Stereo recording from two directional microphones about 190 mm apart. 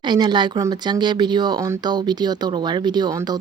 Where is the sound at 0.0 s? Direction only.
25° right (ahead or behind).